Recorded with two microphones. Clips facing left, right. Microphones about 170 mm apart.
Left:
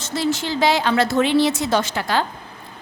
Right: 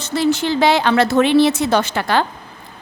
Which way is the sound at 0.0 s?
60° right (ahead or behind).